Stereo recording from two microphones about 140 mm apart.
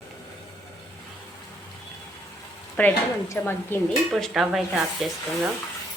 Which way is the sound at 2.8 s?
10° left (ahead or behind).